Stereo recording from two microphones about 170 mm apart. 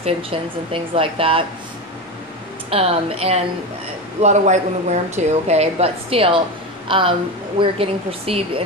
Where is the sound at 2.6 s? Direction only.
35° right (ahead or behind).